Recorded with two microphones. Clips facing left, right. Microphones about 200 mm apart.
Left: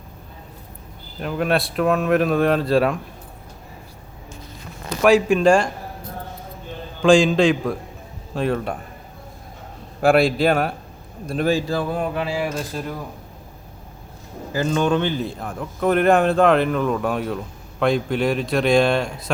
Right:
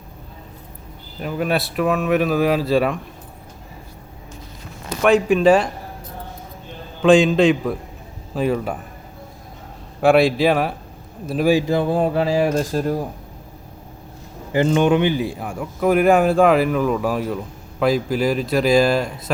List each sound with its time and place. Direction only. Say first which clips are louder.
1.2 s speech: even; 5° right (ahead or behind)
5.0 s speech: right 1 dB; centre (ahead or behind)
7.0 s speech: right 1 dB; centre (ahead or behind)
10.0 s speech: right 2 dB; centre (ahead or behind)
11.5 s speech: right 4 dB; 20° right (ahead or behind); by 13.1 s 40° right (ahead or behind)
14.5 s speech: right 4 dB; 20° right (ahead or behind); by 19.1 s 5° right (ahead or behind)